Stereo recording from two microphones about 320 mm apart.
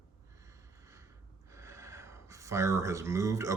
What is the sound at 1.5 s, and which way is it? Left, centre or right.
Speech, centre.